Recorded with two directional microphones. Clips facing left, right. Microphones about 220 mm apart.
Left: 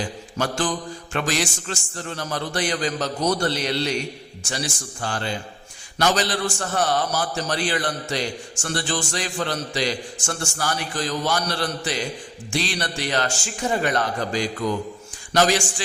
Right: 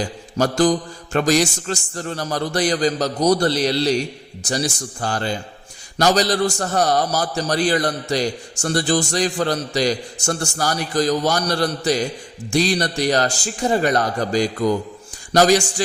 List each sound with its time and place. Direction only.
0.3 s a man's voice: 40° right (ahead or behind)